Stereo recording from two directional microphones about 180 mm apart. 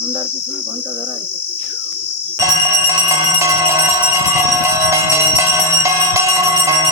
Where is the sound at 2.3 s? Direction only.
15° right (ahead or behind).